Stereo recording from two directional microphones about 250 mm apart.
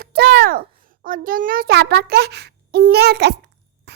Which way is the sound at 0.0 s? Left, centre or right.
Right.